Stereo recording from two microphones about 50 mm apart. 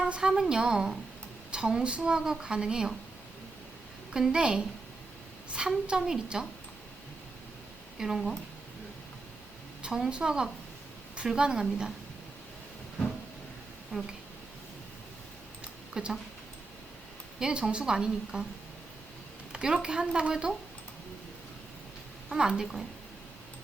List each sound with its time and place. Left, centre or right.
0.1 s speech: centre
4.1 s speech: centre
7.9 s speech: centre
9.8 s speech: centre
13.9 s speech: centre
16.0 s speech: centre
17.4 s speech: right
19.5 s speech: centre
22.3 s speech: centre